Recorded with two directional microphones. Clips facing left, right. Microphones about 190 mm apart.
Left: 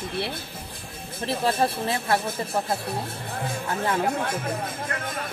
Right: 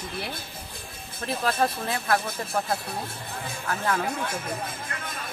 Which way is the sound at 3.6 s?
20° left (ahead or behind).